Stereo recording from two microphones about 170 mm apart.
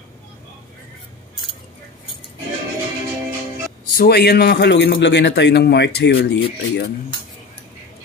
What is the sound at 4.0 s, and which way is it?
A man's voice, 70° left (ahead or behind).